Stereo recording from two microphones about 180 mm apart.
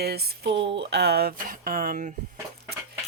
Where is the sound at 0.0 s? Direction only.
60° right (ahead or behind).